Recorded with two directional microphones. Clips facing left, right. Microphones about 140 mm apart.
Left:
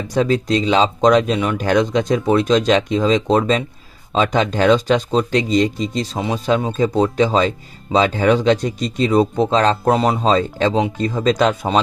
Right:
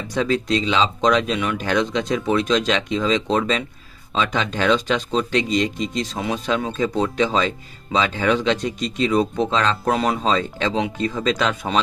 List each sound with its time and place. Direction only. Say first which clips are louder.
0.1 s speech: left 3 dB; 40° left (ahead or behind)